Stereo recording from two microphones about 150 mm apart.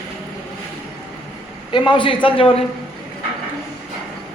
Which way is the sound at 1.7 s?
30° left (ahead or behind).